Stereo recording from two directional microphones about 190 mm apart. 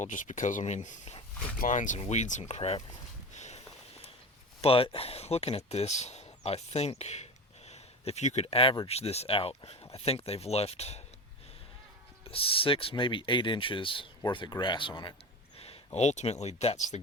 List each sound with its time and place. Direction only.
0.0 s speech: 40° left (ahead or behind)
3.3 s walk: 35° left (ahead or behind)
4.6 s speech: 30° left (ahead or behind)
12.3 s speech: 30° left (ahead or behind)